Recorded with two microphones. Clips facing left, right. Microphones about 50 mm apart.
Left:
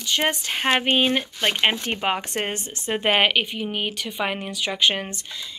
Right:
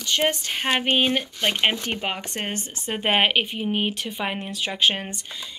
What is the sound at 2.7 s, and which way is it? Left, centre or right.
Speech, centre.